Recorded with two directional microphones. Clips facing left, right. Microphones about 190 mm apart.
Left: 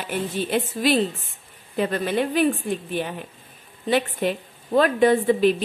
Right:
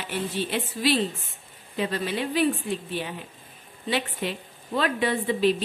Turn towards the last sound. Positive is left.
turn(degrees=50)  # may be behind; listen again after turning